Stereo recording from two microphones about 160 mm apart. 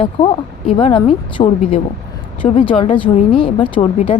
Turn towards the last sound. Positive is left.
turn(degrees=35)  # may be behind; listen again after turning